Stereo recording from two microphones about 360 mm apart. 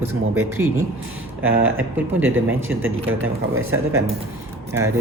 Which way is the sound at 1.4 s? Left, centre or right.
Right.